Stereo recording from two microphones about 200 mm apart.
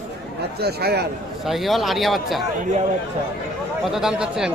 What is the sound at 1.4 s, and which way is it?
Speech, centre (ahead or behind).